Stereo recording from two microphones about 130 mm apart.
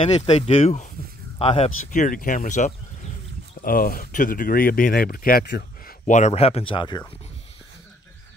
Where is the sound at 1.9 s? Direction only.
85° left.